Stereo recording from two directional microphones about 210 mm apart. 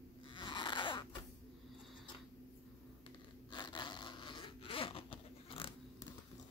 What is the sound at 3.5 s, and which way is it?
Zipper, 20° left (ahead or behind).